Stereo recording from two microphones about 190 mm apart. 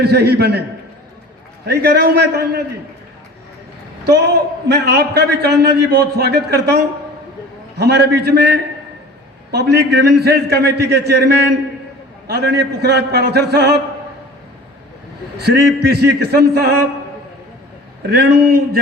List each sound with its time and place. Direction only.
0.0 s a man's voice: 55° right (ahead or behind)
1.6 s a man's voice: 55° right (ahead or behind)
4.0 s a man's voice: 60° right (ahead or behind)
15.4 s a man's voice: 55° right (ahead or behind)
18.1 s speech: 55° right (ahead or behind)